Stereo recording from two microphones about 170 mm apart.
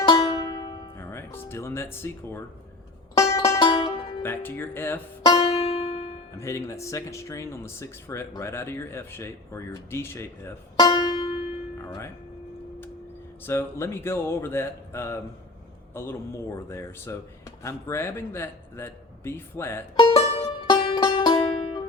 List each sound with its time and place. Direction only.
0.1 s music: 25° left (ahead or behind)
4.2 s speech: 15° left (ahead or behind)
5.2 s music: 30° left (ahead or behind)
6.3 s speech: 15° left (ahead or behind)
10.8 s music: 25° left (ahead or behind)
11.8 s speech: 15° left (ahead or behind)
13.4 s speech: 15° left (ahead or behind)
20.0 s music: 30° left (ahead or behind)